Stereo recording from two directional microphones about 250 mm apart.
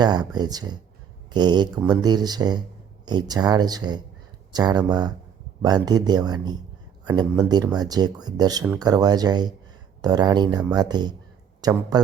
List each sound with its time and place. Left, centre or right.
0.0 s speech: centre